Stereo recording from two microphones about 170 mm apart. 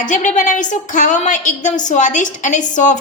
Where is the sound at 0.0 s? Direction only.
45° left (ahead or behind).